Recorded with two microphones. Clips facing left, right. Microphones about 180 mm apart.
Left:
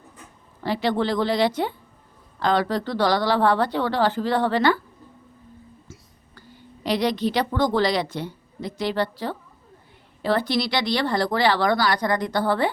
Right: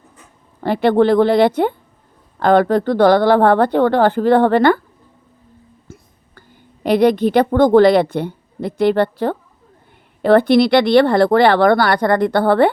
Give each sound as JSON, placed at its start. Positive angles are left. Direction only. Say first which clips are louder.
{"t": 0.6, "sound": "speech", "louder": "right 9 dB", "side_deg": -55}
{"t": 5.9, "sound": "a woman's voice", "louder": "right 5 dB", "side_deg": -50}